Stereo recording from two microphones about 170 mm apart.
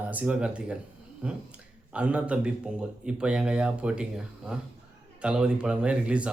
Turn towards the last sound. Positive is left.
turn(degrees=-5)  # may be behind; listen again after turning